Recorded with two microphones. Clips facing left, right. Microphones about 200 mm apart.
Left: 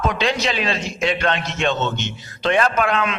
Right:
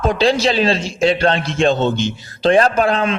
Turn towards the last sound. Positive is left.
turn(degrees=-30)  # may be behind; listen again after turning